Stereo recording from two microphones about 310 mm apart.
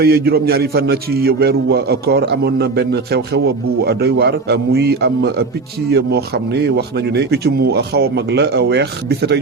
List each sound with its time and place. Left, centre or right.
0.0 s a man's voice: right